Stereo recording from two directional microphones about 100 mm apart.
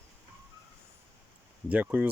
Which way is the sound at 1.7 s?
15° right (ahead or behind).